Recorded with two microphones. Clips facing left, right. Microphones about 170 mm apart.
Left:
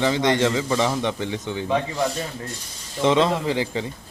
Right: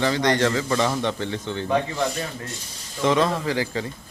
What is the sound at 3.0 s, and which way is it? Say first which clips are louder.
Speech: left 2 dB; 20° left (ahead or behind).